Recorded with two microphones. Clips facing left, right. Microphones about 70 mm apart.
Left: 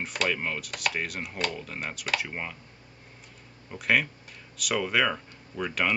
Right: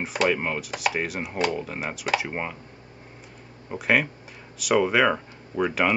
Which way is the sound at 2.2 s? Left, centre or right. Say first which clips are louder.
Right 6 dB; centre.